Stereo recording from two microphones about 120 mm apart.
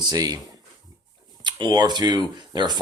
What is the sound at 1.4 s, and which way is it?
Speech, 40° right (ahead or behind).